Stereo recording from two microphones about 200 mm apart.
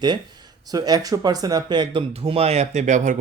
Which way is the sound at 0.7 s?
20° right (ahead or behind).